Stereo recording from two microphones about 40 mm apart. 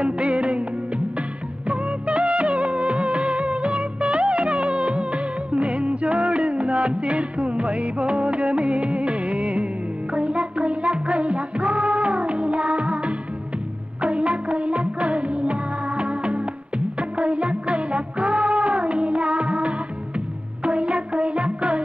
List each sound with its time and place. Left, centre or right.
0.0 s music: right
1.7 s music of bollywood: right
10.1 s music: right